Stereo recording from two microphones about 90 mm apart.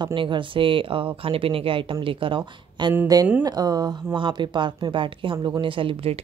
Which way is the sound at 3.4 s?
45° right (ahead or behind).